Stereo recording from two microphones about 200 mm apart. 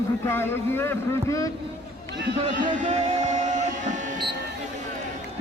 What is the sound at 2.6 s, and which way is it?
Music, 35° right (ahead or behind).